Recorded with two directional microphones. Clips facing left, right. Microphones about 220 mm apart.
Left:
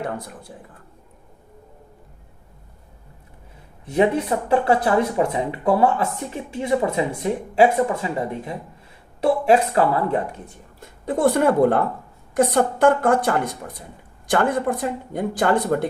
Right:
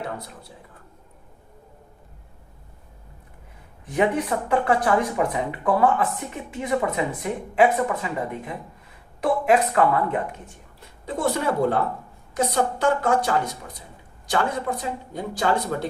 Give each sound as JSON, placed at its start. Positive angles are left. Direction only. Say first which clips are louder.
{"t": 0.0, "sound": "a woman's voice", "louder": "left 4 dB", "side_deg": 50}
{"t": 3.8, "sound": "speech", "louder": "left 3 dB", "side_deg": 30}
{"t": 11.0, "sound": "a woman's voice", "louder": "left 6 dB", "side_deg": 55}